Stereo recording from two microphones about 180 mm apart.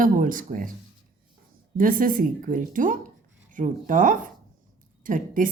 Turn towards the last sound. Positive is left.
turn(degrees=-50)  # may be behind; listen again after turning